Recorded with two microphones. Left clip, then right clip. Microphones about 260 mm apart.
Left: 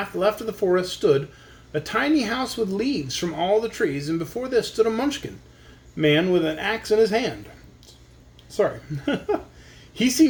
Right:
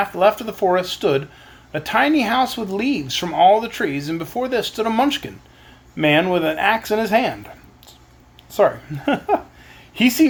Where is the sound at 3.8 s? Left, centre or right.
Right.